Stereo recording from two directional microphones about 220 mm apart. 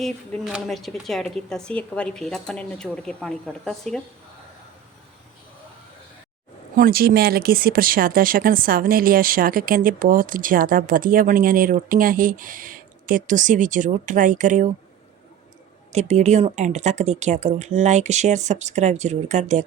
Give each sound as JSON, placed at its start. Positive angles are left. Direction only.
{"t": 0.0, "sound": "speech", "side_deg": 0}
{"t": 6.7, "sound": "speech", "side_deg": -40}
{"t": 15.9, "sound": "speech", "side_deg": -30}